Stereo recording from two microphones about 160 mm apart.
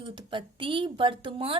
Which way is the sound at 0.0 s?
30° right (ahead or behind).